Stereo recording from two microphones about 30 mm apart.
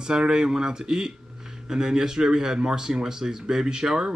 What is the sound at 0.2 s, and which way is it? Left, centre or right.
Speech, right.